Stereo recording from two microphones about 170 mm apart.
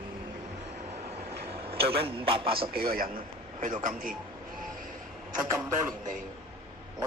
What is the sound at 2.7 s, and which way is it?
A man's voice, 60° right (ahead or behind).